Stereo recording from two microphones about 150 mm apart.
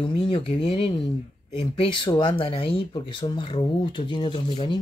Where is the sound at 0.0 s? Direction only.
35° left (ahead or behind).